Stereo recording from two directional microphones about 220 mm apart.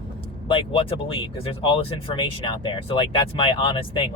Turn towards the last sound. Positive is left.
turn(degrees=25)  # may be behind; listen again after turning